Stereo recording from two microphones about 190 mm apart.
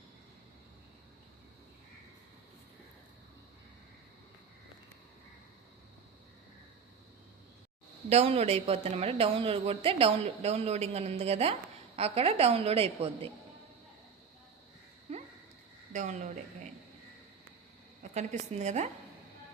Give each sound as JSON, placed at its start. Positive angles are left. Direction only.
{"t": 8.1, "sound": "a woman's voice", "side_deg": -35}
{"t": 15.1, "sound": "a sound", "side_deg": -35}
{"t": 15.9, "sound": "a woman's voice", "side_deg": -40}
{"t": 18.1, "sound": "a woman's voice", "side_deg": -40}